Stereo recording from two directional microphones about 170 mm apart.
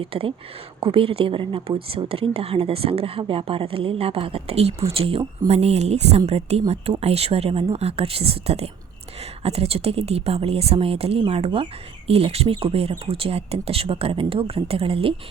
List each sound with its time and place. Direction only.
0.0 s a woman's voice: 35° right (ahead or behind)